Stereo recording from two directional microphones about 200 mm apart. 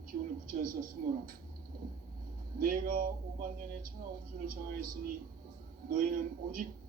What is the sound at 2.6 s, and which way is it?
Speech, 45° right (ahead or behind).